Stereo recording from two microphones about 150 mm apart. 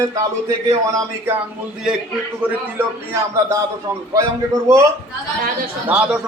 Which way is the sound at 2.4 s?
10° right (ahead or behind).